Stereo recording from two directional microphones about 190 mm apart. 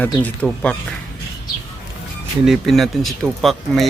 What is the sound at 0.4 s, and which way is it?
Speech, 5° left (ahead or behind).